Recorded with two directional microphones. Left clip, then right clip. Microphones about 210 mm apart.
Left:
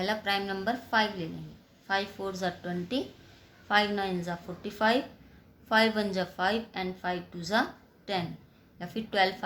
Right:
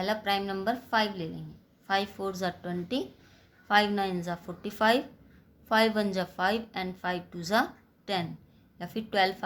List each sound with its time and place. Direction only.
0.0 s a woman's voice: 25° right (ahead or behind)